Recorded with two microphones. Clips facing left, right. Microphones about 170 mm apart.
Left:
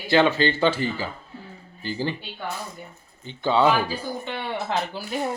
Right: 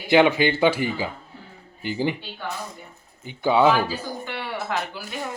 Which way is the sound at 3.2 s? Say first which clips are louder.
Right 2 dB; 10° right (ahead or behind).